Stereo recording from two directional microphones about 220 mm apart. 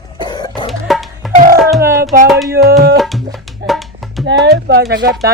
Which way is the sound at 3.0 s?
Centre (ahead or behind).